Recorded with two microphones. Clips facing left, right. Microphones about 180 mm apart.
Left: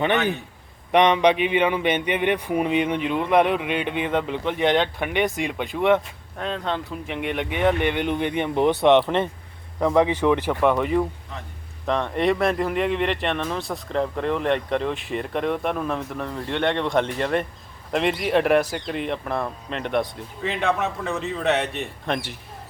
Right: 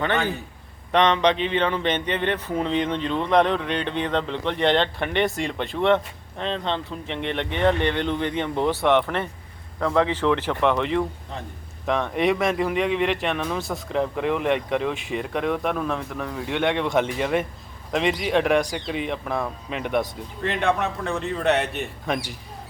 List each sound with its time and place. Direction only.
0.0 s a man's voice: 20° left (ahead or behind); by 22.4 s centre (ahead or behind)